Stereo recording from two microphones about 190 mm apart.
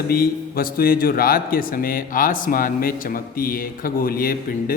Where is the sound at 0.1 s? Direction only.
50° left (ahead or behind).